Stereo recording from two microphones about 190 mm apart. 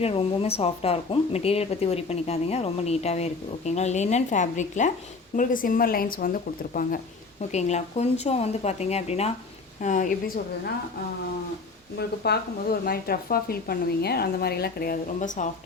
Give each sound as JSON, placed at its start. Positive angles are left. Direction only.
{"t": 0.0, "sound": "speech", "side_deg": 30}
{"t": 7.5, "sound": "speech", "side_deg": 35}
{"t": 11.9, "sound": "speech", "side_deg": 60}